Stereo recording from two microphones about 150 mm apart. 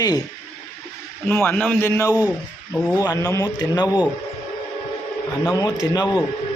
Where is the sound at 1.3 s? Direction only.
10° left (ahead or behind).